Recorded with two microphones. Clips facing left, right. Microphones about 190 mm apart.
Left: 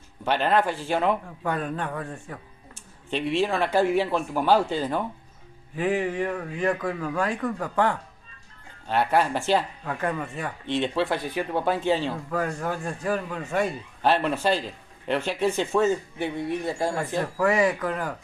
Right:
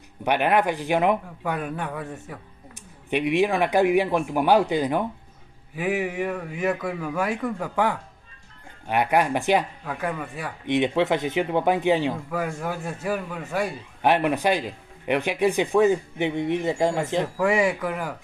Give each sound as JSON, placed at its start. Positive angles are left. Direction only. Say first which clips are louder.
{"t": 0.2, "sound": "speech", "louder": "right 1 dB", "side_deg": -15}
{"t": 9.8, "sound": "a man's voice", "louder": "left 1 dB", "side_deg": 0}
{"t": 10.7, "sound": "a man's voice", "louder": "right 4 dB", "side_deg": -15}
{"t": 14.0, "sound": "speech", "louder": "right 2 dB", "side_deg": -15}